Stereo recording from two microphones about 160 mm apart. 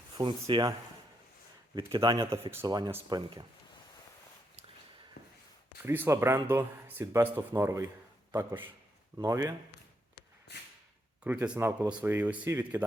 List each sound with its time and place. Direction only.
0.2 s speech: 30° right (ahead or behind)
1.7 s speech: 25° right (ahead or behind)
5.8 s a man's voice: 15° right (ahead or behind)
11.2 s speech: 10° right (ahead or behind)